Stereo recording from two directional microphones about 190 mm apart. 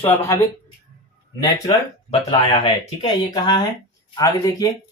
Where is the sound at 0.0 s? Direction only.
15° left (ahead or behind).